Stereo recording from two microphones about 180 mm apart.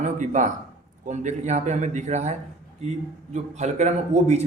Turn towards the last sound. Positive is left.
turn(degrees=-40)  # may be behind; listen again after turning